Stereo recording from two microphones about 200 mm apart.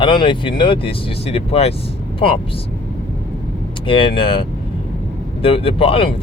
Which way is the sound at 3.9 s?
25° left (ahead or behind).